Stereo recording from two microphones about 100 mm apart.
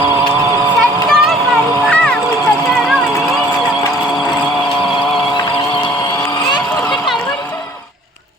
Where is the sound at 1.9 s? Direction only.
10° left (ahead or behind).